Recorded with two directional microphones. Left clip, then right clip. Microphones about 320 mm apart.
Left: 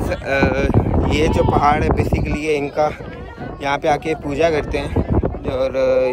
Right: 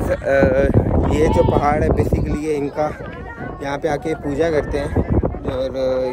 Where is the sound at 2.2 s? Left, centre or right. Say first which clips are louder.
Left 1 dB; centre.